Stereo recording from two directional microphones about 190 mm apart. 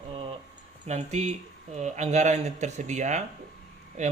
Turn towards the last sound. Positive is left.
turn(degrees=-40)  # may be behind; listen again after turning